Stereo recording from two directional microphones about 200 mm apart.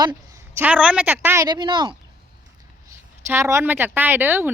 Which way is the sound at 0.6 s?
5° right (ahead or behind).